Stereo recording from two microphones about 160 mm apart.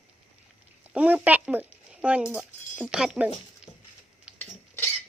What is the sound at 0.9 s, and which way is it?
Speech, 10° right (ahead or behind).